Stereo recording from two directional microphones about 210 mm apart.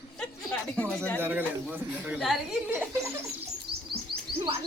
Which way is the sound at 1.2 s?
10° right (ahead or behind).